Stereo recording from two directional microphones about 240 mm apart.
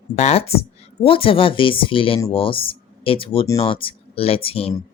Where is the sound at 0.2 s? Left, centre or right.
Left.